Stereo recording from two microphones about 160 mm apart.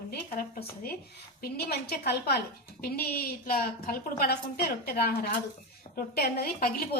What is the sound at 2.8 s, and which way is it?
A woman's voice, 70° left (ahead or behind).